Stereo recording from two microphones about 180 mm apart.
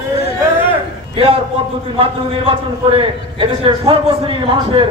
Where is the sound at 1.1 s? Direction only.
30° right (ahead or behind).